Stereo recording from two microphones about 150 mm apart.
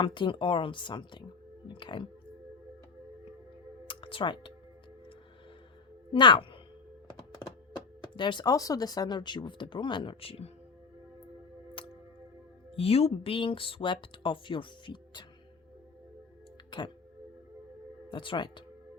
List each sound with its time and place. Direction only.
0.0 s speech: 35° left (ahead or behind)
1.6 s music: 35° left (ahead or behind)
3.8 s music: 35° left (ahead or behind)
6.1 s speech: 35° left (ahead or behind)
8.0 s speech: 30° left (ahead or behind)
12.7 s speech: 40° left (ahead or behind)
18.1 s speech: 30° left (ahead or behind)